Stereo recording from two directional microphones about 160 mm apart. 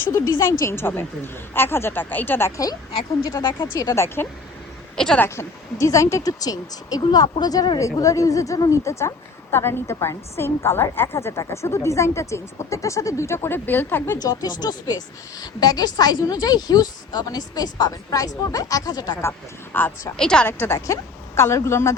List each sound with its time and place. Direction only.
0.1 s a woman's voice: 20° left (ahead or behind)
14.2 s speech: 25° left (ahead or behind)
19.7 s a woman's voice: 10° left (ahead or behind)